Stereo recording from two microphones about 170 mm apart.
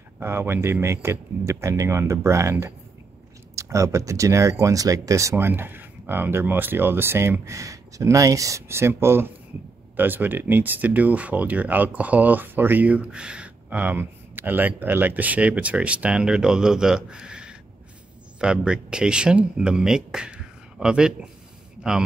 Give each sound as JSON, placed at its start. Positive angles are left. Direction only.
{"t": 0.2, "sound": "speech", "side_deg": -15}